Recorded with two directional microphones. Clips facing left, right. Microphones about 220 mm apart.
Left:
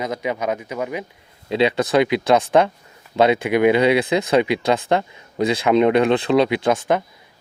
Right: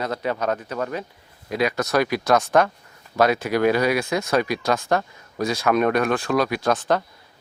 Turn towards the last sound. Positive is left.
turn(degrees=20)  # may be behind; listen again after turning